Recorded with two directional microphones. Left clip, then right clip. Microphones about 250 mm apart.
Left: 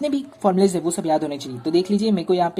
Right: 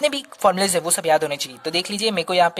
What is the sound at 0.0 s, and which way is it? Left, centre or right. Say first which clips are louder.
Speech: right 3 dB; right.